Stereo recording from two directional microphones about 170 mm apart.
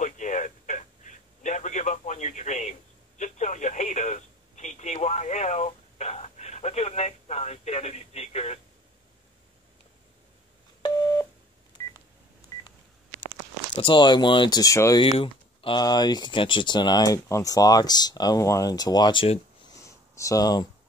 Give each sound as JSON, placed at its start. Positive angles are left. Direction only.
{"t": 0.0, "sound": "a sound", "side_deg": 45}
{"t": 3.2, "sound": "telephone", "side_deg": 45}
{"t": 10.8, "sound": "busy signal", "side_deg": 25}
{"t": 11.8, "sound": "telephone dialing", "side_deg": 20}
{"t": 13.7, "sound": "speech", "side_deg": 30}
{"t": 15.0, "sound": "speech", "side_deg": 35}
{"t": 20.2, "sound": "speech", "side_deg": 20}